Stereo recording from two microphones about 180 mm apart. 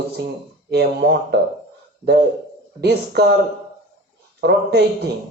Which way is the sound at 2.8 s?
65° right (ahead or behind).